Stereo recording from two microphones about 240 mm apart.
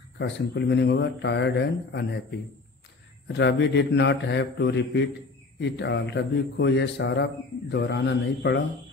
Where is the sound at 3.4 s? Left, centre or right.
Left.